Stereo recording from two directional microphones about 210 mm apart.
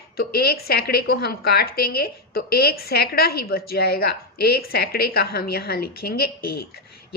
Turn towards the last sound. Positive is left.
turn(degrees=45)  # may be behind; listen again after turning